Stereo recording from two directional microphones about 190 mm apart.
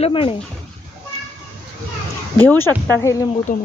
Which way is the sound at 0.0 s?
30° left (ahead or behind).